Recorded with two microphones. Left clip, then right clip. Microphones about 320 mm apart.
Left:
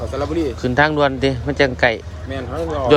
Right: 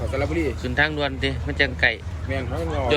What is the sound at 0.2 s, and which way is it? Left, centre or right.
A man's voice, centre.